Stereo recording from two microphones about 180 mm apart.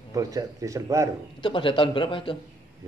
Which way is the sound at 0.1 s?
20° right (ahead or behind).